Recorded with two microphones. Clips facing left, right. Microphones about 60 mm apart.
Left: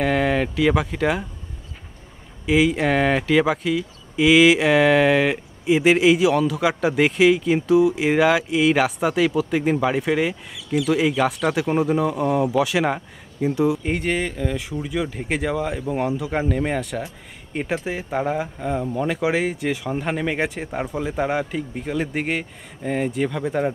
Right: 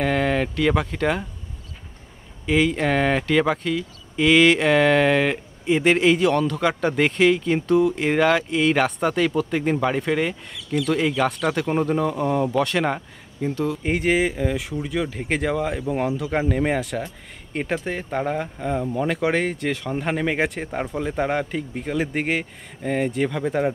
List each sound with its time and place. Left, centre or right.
0.0 s speech: centre
2.4 s speech: centre